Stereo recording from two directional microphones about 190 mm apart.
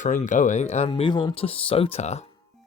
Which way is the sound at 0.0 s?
40° left (ahead or behind).